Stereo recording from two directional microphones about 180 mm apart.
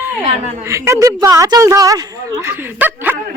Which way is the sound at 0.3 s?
35° right (ahead or behind).